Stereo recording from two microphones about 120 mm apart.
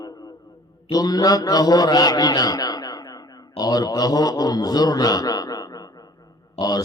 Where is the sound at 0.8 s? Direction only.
35° left (ahead or behind).